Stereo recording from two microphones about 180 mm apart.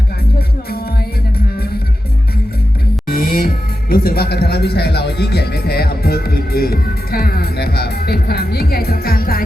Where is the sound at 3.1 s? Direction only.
55° left (ahead or behind).